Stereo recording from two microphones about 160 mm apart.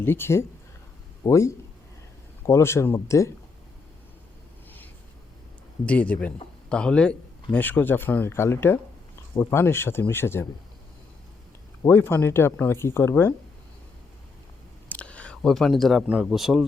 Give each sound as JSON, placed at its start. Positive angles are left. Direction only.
{"t": 0.0, "sound": "a man's voice", "side_deg": 15}
{"t": 5.8, "sound": "speech", "side_deg": 10}
{"t": 11.9, "sound": "speech", "side_deg": 15}
{"t": 14.8, "sound": "speech", "side_deg": 10}